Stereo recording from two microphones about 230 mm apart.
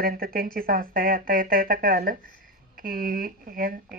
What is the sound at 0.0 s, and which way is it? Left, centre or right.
Speech, right.